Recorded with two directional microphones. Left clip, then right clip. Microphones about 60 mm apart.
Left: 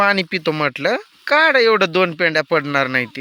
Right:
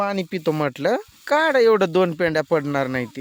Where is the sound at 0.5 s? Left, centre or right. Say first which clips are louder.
Left 2 dB; right.